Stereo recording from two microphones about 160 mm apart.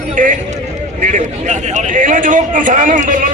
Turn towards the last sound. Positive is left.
turn(degrees=-55)  # may be behind; listen again after turning